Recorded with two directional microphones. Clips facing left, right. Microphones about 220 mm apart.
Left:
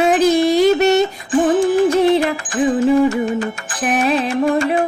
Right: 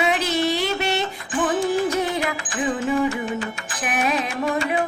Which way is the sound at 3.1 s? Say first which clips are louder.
Left 7 dB; 45° left (ahead or behind).